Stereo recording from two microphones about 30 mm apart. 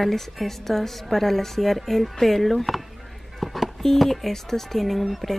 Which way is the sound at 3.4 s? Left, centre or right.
Centre.